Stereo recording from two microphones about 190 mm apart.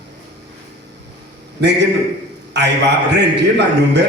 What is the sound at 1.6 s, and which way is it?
A man's voice, 65° right (ahead or behind).